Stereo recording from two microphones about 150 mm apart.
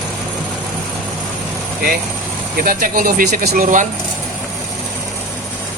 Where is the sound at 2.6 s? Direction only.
70° right (ahead or behind).